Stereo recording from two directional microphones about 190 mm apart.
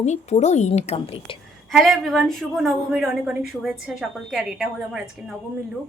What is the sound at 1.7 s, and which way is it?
Speech, centre (ahead or behind).